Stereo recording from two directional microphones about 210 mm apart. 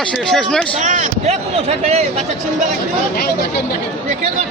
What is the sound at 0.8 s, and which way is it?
Speech, 35° right (ahead or behind).